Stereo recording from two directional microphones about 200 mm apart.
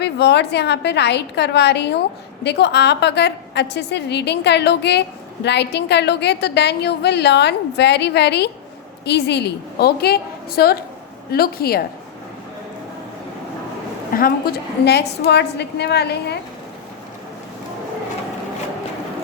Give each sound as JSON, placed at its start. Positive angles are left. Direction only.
{"t": 0.0, "sound": "a woman's voice", "side_deg": 55}
{"t": 14.1, "sound": "a woman's voice", "side_deg": 45}